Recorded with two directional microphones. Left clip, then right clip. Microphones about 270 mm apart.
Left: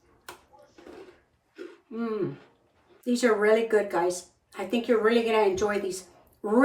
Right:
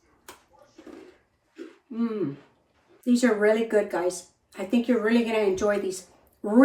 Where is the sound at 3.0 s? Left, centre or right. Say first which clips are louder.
Right 1 dB; centre.